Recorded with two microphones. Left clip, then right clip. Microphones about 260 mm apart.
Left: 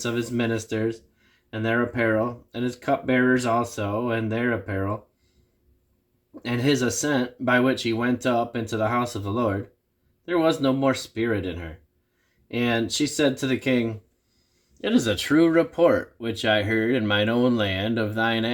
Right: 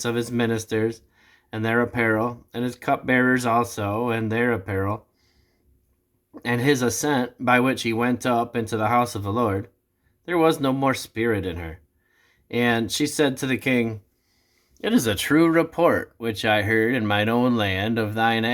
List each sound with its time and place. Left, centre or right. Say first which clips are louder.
0.0 s speech: right 2 dB; centre
6.3 s speech: right 2 dB; centre